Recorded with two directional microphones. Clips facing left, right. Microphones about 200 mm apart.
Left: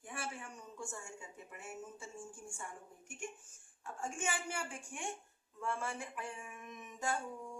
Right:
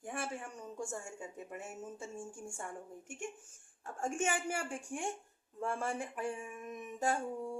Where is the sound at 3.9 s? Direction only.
45° right (ahead or behind).